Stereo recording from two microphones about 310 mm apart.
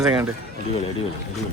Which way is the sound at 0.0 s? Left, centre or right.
Centre.